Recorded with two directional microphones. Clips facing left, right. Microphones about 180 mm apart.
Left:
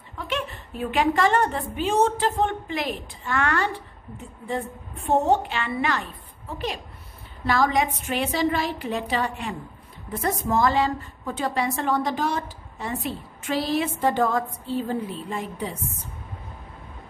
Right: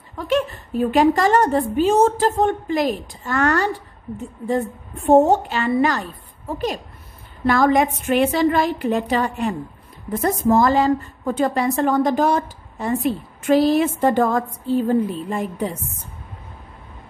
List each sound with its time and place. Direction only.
0.3 s a woman's voice: 40° right (ahead or behind)